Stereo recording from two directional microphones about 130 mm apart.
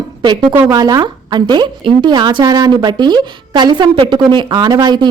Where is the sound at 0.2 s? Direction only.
35° right (ahead or behind).